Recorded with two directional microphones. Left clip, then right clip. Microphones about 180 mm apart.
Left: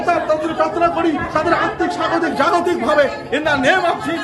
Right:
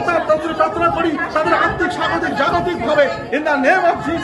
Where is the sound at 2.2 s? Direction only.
45° left (ahead or behind).